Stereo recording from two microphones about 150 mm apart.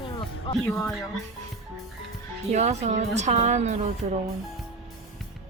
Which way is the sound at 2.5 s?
50° right (ahead or behind).